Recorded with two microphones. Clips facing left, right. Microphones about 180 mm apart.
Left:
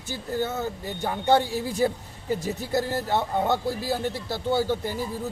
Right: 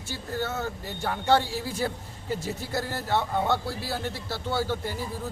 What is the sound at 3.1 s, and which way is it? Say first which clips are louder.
Speech: even; 20° left (ahead or behind).